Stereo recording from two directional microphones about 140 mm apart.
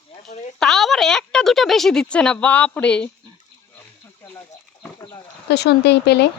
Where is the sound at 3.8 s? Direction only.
15° left (ahead or behind).